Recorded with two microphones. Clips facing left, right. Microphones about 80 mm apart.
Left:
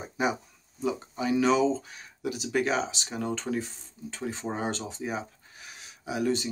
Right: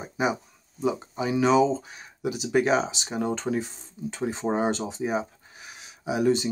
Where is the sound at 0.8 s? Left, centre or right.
Centre.